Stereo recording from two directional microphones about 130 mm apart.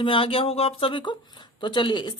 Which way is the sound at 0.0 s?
45° left (ahead or behind).